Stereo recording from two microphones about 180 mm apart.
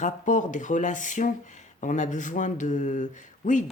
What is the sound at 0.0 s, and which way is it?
Speech, 45° left (ahead or behind).